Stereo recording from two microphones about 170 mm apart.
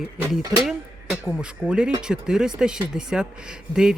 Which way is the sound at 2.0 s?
5° right (ahead or behind).